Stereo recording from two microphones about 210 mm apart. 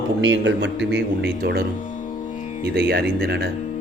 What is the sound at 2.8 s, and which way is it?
Speech, 50° right (ahead or behind).